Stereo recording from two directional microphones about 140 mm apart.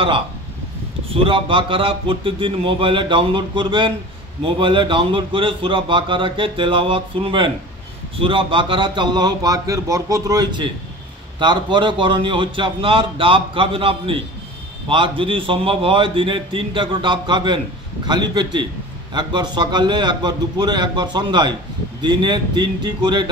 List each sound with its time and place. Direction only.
1.1 s a man's voice: 40° right (ahead or behind)